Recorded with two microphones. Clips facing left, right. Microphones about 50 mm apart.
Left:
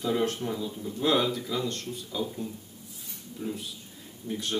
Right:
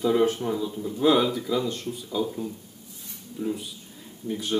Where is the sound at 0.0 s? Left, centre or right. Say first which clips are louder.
Right 6 dB; centre.